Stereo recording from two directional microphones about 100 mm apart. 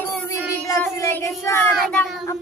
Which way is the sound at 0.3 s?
30° left (ahead or behind).